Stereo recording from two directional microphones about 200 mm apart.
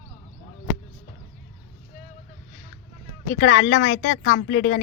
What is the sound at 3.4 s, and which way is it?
A woman's voice, 50° left (ahead or behind).